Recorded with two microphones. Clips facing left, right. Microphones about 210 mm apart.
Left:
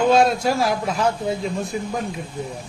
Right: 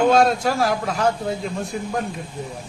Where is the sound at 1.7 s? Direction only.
5° left (ahead or behind).